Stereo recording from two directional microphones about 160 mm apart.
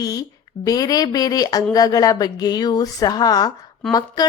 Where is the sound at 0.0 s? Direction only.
25° left (ahead or behind).